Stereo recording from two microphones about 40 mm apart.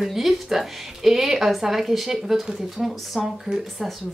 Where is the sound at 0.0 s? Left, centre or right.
Centre.